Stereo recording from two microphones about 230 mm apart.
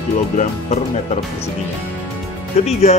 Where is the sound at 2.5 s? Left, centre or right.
Left.